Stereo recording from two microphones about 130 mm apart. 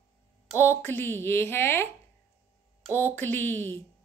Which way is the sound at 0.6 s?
15° left (ahead or behind).